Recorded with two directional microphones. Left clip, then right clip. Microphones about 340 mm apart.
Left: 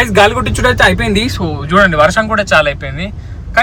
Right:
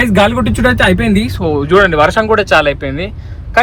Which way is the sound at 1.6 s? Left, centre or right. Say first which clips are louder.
Even; centre.